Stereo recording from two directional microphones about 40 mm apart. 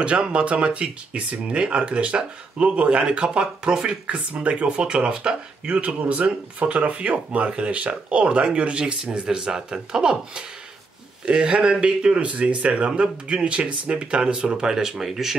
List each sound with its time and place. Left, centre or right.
0.0 s speech: right; by 15.3 s centre